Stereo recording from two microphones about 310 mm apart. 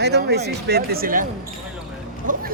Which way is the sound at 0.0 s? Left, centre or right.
Right.